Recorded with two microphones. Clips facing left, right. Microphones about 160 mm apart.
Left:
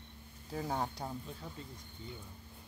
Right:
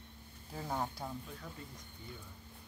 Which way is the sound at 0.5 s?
25° left (ahead or behind).